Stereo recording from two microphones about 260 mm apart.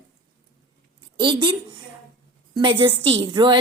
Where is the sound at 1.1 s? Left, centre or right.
Centre.